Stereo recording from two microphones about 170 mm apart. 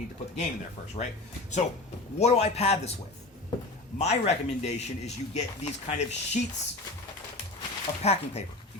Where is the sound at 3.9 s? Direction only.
40° left (ahead or behind).